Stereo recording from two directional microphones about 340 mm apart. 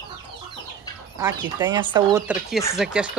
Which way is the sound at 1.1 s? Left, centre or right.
Centre.